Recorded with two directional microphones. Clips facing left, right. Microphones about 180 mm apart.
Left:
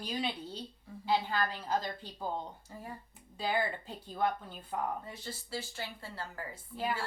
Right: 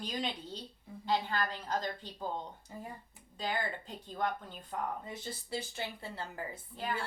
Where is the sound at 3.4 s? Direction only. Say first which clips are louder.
Left 3 dB; 10° left (ahead or behind).